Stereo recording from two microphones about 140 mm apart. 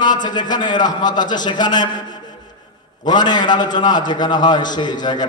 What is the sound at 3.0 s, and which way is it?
A man's voice, 30° left (ahead or behind).